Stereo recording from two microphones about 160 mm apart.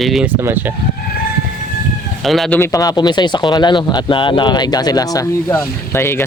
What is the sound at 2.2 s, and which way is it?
Speech, centre (ahead or behind).